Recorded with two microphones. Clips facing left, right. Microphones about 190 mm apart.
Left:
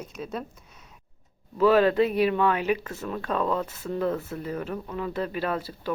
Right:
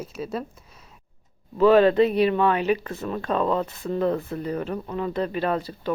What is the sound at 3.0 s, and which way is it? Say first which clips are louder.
Speech: right 3 dB; 15° right (ahead or behind).